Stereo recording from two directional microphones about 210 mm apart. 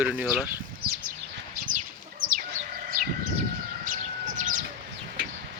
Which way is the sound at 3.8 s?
40° right (ahead or behind).